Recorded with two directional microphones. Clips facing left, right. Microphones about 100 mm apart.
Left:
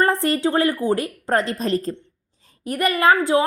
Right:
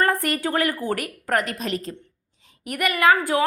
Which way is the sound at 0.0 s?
25° left (ahead or behind).